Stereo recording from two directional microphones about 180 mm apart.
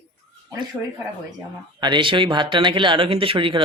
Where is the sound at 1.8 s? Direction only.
25° right (ahead or behind).